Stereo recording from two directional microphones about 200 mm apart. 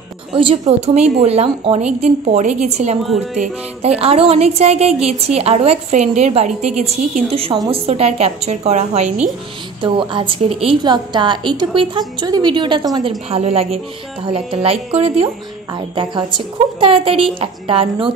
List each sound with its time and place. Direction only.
0.3 s a woman's voice: 25° right (ahead or behind)
13.3 s a woman's voice: 30° right (ahead or behind)